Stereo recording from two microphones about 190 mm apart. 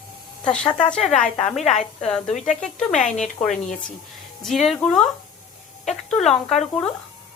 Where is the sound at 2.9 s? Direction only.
40° left (ahead or behind).